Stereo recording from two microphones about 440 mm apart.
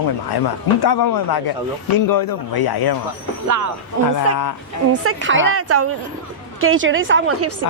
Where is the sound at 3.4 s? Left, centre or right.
Right.